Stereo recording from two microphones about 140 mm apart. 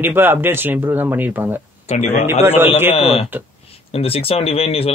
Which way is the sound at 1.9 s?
50° left (ahead or behind).